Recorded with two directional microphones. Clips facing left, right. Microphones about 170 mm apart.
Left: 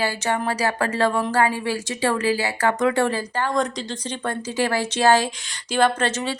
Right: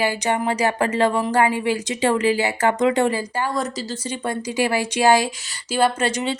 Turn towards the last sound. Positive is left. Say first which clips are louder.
# right 1 dB
turn(degrees=-15)  # may be behind; listen again after turning